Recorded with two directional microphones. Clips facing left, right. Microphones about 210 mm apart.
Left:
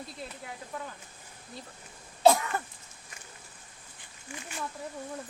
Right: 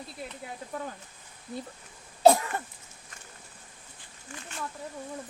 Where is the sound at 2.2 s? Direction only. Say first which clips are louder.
Right 2 dB; 35° right (ahead or behind).